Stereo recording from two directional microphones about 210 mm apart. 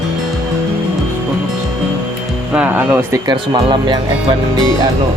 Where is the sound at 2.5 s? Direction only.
5° right (ahead or behind).